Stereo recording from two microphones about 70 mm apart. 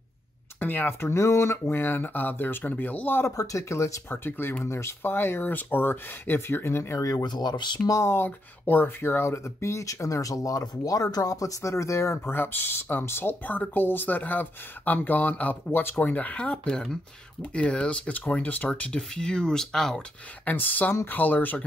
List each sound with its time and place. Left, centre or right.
0.6 s speech: left
1.1 s speech: left
3.3 s speech: left
4.2 s speech: left
7.1 s speech: left
7.9 s speech: left
8.2 s speech: left; by 20.0 s centre
20.4 s speech: left